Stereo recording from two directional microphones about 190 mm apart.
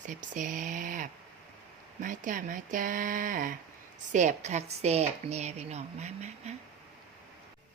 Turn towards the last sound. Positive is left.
turn(degrees=-35)  # may be behind; listen again after turning